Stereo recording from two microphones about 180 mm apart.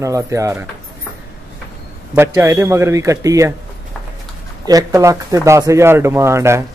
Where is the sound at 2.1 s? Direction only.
10° right (ahead or behind).